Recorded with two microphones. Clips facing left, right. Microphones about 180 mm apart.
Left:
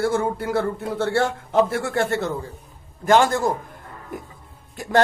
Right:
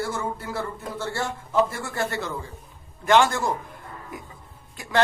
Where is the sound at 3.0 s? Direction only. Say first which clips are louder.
Left 2 dB; 45° left (ahead or behind).